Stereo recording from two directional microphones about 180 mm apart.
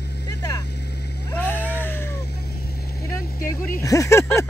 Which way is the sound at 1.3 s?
10° left (ahead or behind).